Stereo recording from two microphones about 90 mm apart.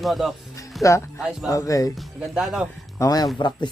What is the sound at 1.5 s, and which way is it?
Speech, 40° left (ahead or behind).